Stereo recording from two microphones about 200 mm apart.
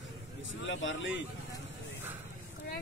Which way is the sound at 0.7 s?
65° left (ahead or behind).